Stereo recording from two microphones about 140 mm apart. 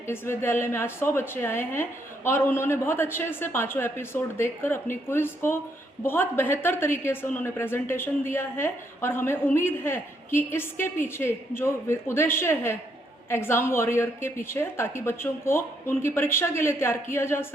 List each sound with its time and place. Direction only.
0.1 s a woman's voice: 15° left (ahead or behind)